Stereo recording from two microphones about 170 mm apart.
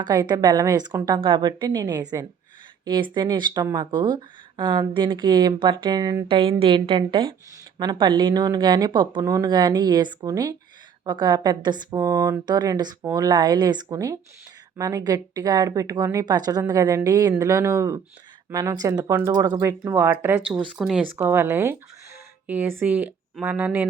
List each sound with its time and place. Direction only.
0.0 s speech: 25° right (ahead or behind)